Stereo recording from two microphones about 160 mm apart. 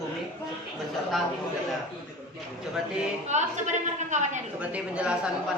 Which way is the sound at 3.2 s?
45° right (ahead or behind).